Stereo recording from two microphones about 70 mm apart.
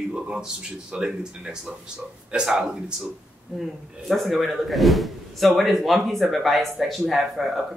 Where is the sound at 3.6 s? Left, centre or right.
Centre.